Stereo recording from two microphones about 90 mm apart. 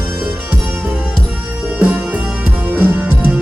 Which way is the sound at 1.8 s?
20° right (ahead or behind).